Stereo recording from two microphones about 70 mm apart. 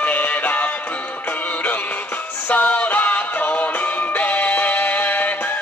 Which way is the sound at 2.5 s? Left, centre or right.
Left.